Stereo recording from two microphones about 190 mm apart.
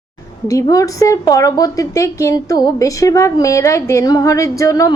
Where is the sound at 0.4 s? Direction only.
15° left (ahead or behind).